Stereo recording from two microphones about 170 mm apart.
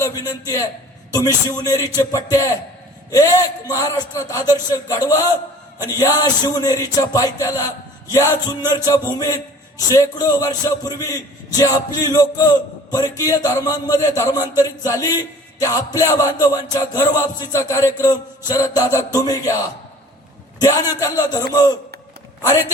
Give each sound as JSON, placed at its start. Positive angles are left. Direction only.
{"t": 0.0, "sound": "a sound", "side_deg": 20}
{"t": 1.1, "sound": "a man's voice", "side_deg": 20}
{"t": 3.1, "sound": "a man's voice", "side_deg": 20}
{"t": 21.0, "sound": "a man's voice", "side_deg": 20}